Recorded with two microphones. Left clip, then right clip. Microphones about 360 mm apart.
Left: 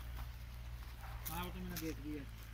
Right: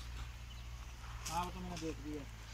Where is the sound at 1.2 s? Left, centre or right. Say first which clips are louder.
Right 7 dB; centre.